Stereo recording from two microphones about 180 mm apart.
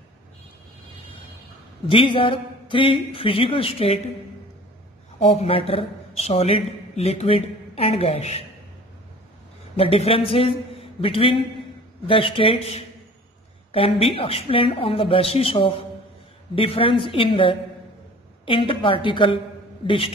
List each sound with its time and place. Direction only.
1.9 s a man's voice: 30° left (ahead or behind)
5.2 s a man's voice: 35° left (ahead or behind)
9.8 s a man's voice: 30° left (ahead or behind)